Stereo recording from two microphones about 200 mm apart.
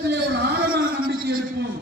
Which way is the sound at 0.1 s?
55° right (ahead or behind).